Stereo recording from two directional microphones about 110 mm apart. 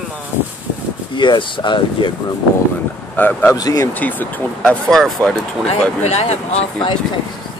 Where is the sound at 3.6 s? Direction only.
35° left (ahead or behind).